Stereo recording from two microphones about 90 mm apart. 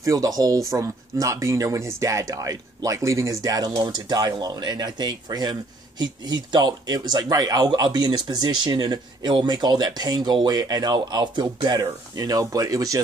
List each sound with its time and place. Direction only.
0.0 s speech: 40° right (ahead or behind)